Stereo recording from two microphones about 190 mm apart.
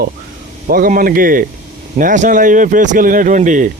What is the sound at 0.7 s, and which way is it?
Speech, 50° right (ahead or behind).